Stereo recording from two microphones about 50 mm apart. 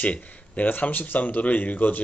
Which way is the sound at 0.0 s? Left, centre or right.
Left.